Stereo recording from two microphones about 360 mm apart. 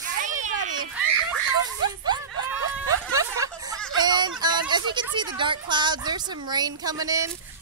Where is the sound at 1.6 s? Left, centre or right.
Centre.